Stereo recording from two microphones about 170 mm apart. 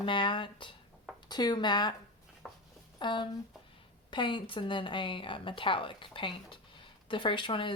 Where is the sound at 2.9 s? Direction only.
25° left (ahead or behind).